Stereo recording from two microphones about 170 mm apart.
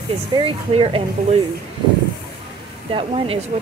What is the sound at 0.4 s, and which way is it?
Speech, 30° right (ahead or behind).